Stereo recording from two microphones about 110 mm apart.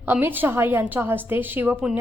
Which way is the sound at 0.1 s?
20° right (ahead or behind).